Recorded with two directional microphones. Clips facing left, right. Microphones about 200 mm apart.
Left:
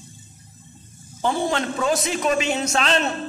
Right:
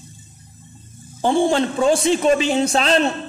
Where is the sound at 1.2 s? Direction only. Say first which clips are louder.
Right 6 dB; 30° right (ahead or behind).